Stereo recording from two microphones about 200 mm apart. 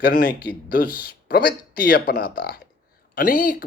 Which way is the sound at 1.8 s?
45° left (ahead or behind).